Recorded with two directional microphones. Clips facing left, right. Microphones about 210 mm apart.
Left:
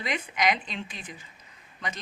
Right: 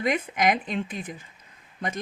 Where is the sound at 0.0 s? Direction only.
50° right (ahead or behind).